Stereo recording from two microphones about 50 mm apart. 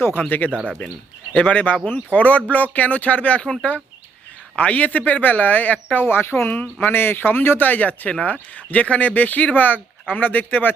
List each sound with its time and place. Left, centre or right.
0.3 s speech: left
0.8 s speech: left
4.5 s speech: left
6.5 s speech: left
6.9 s speech: left